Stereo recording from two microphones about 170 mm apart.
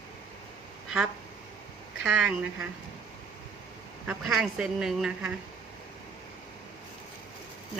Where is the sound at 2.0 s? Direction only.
5° right (ahead or behind).